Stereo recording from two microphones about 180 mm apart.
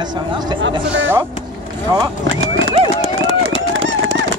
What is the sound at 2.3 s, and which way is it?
Clip-clop, 90° right.